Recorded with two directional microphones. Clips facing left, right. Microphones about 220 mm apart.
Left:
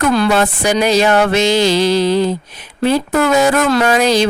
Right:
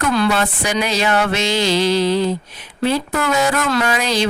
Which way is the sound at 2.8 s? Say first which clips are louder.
Left 5 dB; 45° left (ahead or behind).